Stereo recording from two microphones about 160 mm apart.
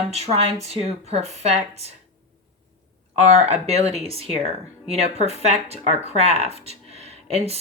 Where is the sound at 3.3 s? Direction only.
40° right (ahead or behind).